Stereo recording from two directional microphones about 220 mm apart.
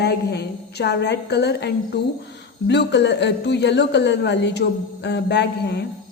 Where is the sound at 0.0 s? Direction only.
50° left (ahead or behind).